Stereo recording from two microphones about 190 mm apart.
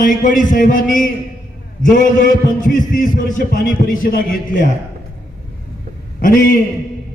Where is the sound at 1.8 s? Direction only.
45° left (ahead or behind).